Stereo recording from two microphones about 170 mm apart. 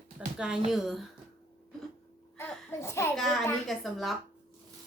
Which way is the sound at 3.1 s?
Centre (ahead or behind).